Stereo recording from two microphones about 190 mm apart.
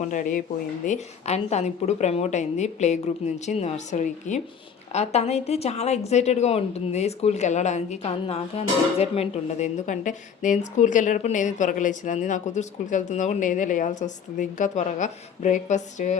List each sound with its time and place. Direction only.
0.0 s speech: 45° left (ahead or behind)